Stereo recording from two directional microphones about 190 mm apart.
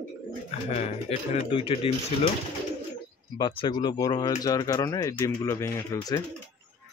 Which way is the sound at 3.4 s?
25° left (ahead or behind).